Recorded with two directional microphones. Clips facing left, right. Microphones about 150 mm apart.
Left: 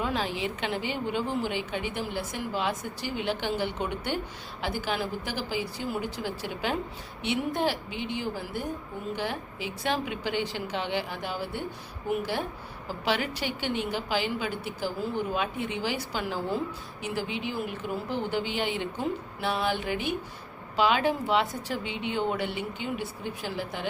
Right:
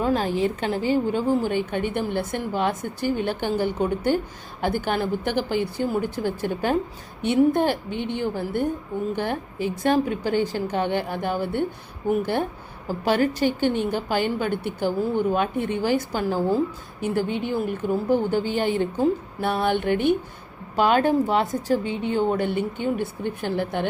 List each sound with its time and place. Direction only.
0.0 s a woman's voice: 45° right (ahead or behind)